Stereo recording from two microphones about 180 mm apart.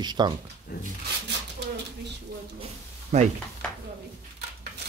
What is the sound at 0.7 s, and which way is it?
Speech, 60° left (ahead or behind).